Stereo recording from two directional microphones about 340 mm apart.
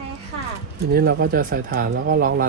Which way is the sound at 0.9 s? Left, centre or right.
Right.